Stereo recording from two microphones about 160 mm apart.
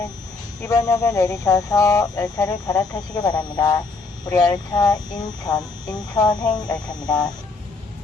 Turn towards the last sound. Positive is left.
turn(degrees=25)  # may be behind; listen again after turning